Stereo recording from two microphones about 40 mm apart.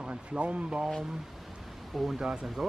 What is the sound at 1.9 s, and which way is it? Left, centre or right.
Speech, centre.